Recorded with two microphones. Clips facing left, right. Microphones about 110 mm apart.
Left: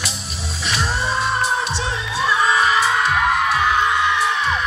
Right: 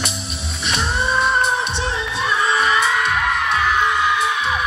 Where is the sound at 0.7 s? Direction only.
60° right (ahead or behind).